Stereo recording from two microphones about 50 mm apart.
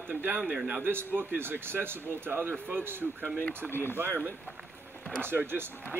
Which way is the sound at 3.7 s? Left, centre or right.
Left.